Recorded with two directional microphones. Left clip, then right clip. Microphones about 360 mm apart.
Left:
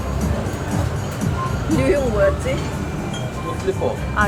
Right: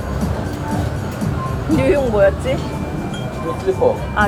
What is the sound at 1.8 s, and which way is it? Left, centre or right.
Speech, centre.